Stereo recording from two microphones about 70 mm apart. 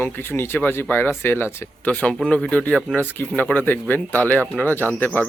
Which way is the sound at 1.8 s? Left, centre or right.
Left.